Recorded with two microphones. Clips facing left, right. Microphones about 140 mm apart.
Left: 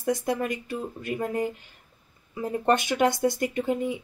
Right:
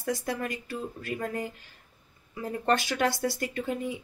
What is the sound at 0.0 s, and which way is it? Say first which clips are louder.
Speech: left 5 dB; 20° left (ahead or behind).